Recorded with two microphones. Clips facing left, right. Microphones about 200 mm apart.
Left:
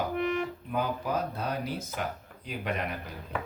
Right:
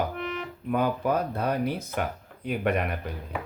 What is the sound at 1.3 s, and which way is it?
Speech, 55° right (ahead or behind).